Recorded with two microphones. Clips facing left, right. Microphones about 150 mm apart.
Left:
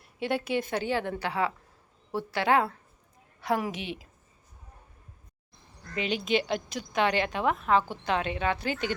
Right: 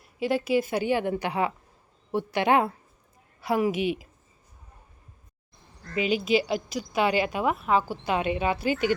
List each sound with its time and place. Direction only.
0.0 s speech: centre (ahead or behind); by 2.7 s 20° right (ahead or behind)
3.4 s speech: 5° right (ahead or behind)
5.9 s speech: 5° right (ahead or behind)